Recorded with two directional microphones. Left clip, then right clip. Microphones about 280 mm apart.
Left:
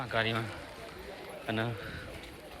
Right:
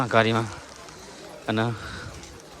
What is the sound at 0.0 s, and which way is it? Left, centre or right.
Speech, right.